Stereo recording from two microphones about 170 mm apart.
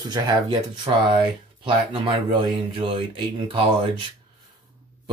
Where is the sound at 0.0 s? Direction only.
25° right (ahead or behind).